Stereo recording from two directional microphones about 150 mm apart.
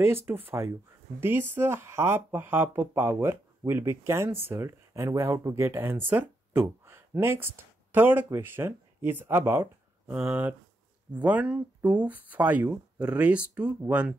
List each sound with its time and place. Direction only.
0.0 s speech: 15° right (ahead or behind)